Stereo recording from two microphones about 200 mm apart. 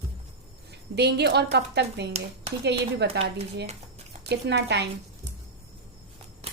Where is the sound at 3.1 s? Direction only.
60° right (ahead or behind).